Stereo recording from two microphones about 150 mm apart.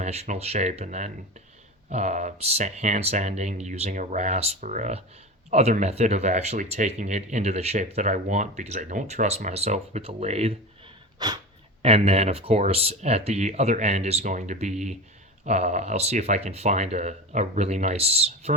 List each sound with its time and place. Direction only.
0.0 s speech: 45° right (ahead or behind)
11.2 s speech: 25° right (ahead or behind)
11.8 s speech: 40° right (ahead or behind)